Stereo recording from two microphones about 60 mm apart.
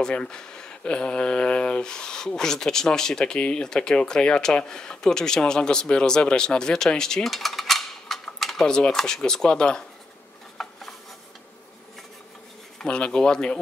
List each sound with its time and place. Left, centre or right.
0.0 s speech: centre
10.6 s rub: centre
12.7 s speech: centre